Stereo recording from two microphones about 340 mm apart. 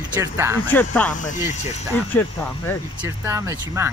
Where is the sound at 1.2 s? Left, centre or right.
Left.